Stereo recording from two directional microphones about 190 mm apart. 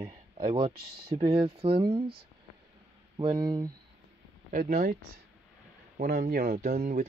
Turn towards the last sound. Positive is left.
turn(degrees=-50)  # may be behind; listen again after turning